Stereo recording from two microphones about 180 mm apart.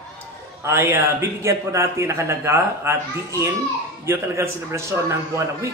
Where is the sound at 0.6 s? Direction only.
15° right (ahead or behind).